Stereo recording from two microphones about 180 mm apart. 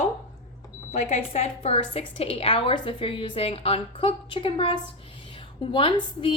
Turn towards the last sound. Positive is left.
turn(degrees=30)  # may be behind; listen again after turning